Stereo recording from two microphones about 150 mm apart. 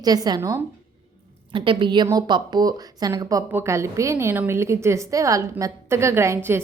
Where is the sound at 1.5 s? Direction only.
35° right (ahead or behind).